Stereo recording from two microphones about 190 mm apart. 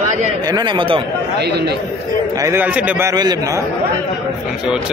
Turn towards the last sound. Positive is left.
turn(degrees=-20)  # may be behind; listen again after turning